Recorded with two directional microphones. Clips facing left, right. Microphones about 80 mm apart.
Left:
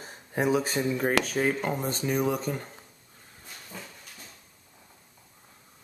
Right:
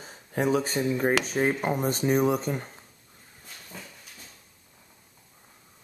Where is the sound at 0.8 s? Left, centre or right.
Centre.